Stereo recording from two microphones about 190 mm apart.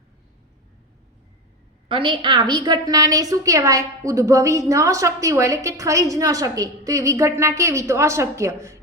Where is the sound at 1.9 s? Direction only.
25° right (ahead or behind).